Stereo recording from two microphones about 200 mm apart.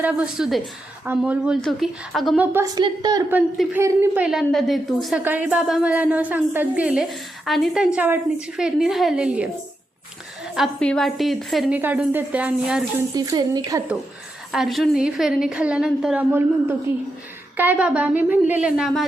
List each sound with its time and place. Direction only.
0.0 s a woman's voice: 5° right (ahead or behind)
3.3 s speech: 10° right (ahead or behind)
13.1 s a woman's voice: 20° right (ahead or behind)
14.5 s a woman's voice: centre (ahead or behind)